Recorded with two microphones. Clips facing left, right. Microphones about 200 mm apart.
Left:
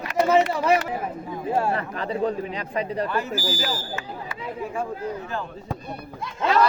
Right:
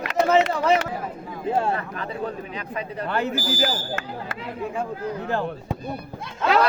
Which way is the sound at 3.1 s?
60° right (ahead or behind).